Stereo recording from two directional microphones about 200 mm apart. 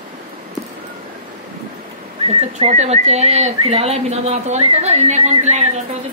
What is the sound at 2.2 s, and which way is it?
Speech, 30° right (ahead or behind).